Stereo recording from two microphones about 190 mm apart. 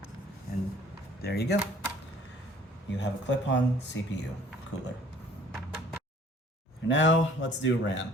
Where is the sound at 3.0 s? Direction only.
70° left (ahead or behind).